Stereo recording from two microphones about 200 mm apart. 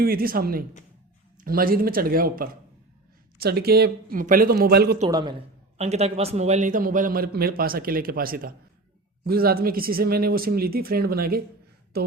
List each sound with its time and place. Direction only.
0.0 s a man's voice: 50° right (ahead or behind)
5.7 s a man's voice: 30° right (ahead or behind); by 11.4 s 50° right (ahead or behind)